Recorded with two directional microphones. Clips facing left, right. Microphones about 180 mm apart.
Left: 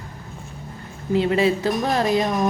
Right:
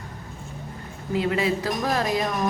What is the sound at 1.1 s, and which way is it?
A woman's voice, 25° left (ahead or behind).